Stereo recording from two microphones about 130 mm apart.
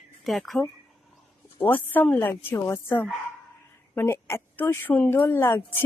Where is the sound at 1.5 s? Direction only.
15° left (ahead or behind).